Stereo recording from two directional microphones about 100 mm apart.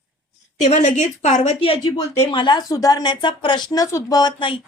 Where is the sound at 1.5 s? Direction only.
70° left (ahead or behind).